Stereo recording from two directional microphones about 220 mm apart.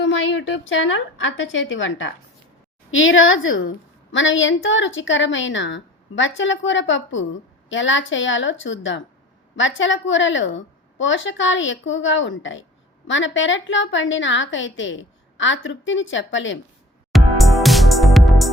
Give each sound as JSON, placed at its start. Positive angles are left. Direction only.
{"t": 0.0, "sound": "a woman's voice", "side_deg": 55}
{"t": 17.1, "sound": "music", "side_deg": 0}